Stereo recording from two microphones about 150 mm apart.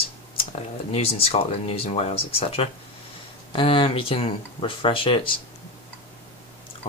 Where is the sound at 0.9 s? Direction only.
40° left (ahead or behind).